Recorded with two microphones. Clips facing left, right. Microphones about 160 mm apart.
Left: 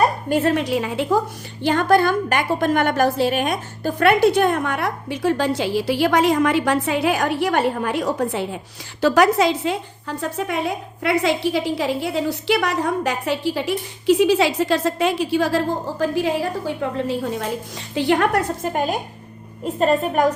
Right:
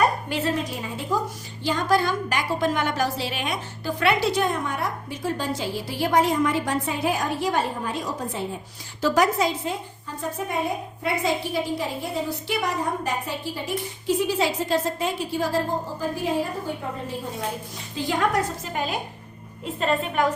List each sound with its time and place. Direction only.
0.3 s a woman's voice: 50° left (ahead or behind)
0.5 s a woman's voice: 85° left
1.6 s a woman's voice: 60° left (ahead or behind); by 17.3 s 85° left
17.9 s a woman's voice: 70° left (ahead or behind); by 20.2 s 40° left (ahead or behind)